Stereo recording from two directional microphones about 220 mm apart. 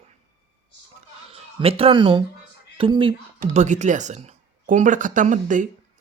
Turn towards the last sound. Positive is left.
turn(degrees=-35)  # may be behind; listen again after turning